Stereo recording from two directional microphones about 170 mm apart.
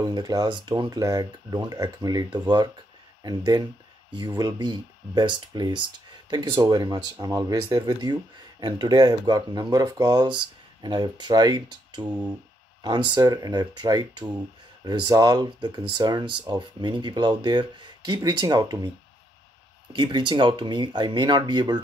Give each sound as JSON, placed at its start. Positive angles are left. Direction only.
{"t": 0.0, "sound": "speech", "side_deg": -25}
{"t": 19.9, "sound": "speech", "side_deg": -25}